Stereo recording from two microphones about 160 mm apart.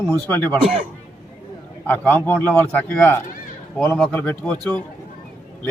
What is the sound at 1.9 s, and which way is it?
A man's voice, 10° left (ahead or behind).